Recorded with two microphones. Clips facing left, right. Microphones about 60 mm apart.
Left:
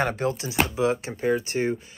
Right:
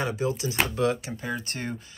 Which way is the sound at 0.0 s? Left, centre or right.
Left.